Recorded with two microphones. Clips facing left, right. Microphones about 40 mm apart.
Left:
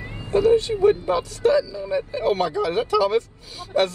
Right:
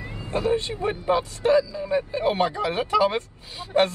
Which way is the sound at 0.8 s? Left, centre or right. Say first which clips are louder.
Left 3 dB; centre.